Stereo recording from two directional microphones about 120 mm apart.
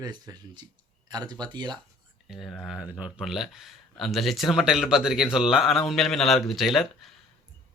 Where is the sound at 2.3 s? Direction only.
Centre (ahead or behind).